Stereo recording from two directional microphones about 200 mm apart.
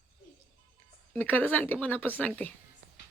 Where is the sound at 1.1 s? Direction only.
10° left (ahead or behind).